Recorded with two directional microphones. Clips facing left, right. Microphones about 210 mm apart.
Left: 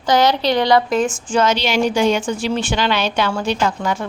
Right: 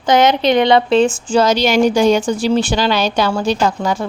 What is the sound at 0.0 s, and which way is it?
A woman's voice, 20° right (ahead or behind).